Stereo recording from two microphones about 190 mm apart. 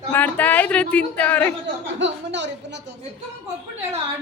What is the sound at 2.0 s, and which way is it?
Speech, 70° right (ahead or behind).